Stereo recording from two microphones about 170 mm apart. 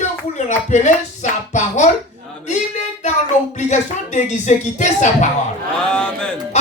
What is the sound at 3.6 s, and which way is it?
Speech, 45° left (ahead or behind).